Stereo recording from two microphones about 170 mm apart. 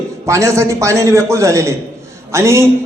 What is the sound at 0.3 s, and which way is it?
A man's voice, 15° right (ahead or behind).